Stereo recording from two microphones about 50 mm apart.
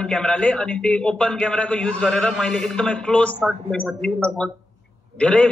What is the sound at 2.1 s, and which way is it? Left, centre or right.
A man's voice, centre.